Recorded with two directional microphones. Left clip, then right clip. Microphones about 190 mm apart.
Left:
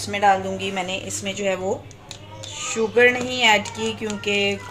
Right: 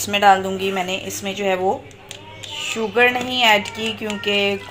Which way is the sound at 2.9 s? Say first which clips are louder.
Even; 5° right (ahead or behind).